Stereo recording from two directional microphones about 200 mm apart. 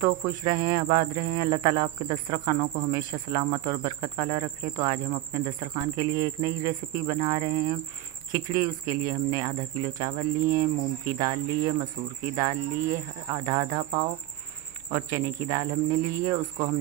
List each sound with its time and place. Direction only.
0.0 s speech: 15° right (ahead or behind)